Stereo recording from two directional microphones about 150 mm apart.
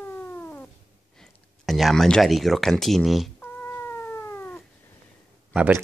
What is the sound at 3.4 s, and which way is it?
Cat, 15° left (ahead or behind).